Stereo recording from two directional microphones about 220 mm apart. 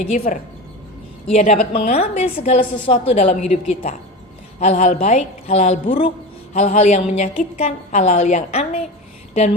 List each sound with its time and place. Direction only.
1.3 s a woman's voice: 30° left (ahead or behind)